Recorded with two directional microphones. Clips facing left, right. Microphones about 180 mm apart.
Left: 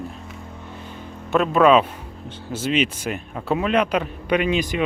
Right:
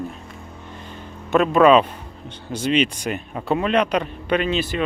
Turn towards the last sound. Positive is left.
turn(degrees=10)  # may be behind; listen again after turning